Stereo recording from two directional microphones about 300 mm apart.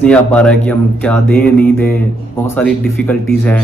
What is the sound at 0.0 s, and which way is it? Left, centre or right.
Speech, centre.